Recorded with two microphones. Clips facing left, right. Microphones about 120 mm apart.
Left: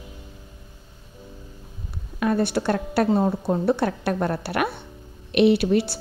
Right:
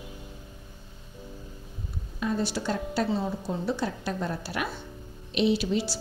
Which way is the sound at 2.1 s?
60° left (ahead or behind).